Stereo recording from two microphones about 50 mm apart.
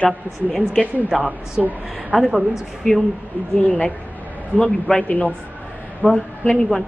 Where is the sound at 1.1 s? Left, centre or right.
Right.